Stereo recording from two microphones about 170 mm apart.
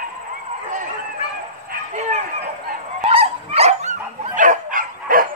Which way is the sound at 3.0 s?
35° right (ahead or behind).